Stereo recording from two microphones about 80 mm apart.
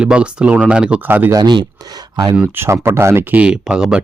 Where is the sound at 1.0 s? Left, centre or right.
Right.